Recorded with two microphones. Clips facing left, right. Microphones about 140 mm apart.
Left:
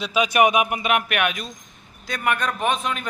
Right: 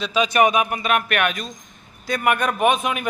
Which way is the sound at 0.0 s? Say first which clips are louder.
Right 1 dB; 10° left (ahead or behind).